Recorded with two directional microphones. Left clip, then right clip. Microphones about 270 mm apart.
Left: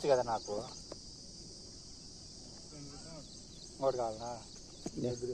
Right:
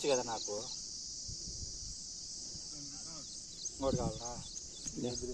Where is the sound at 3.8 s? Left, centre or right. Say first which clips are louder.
Left 3 dB; right.